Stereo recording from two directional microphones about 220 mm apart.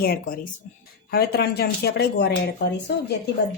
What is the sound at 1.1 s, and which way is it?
A woman's voice, 45° left (ahead or behind).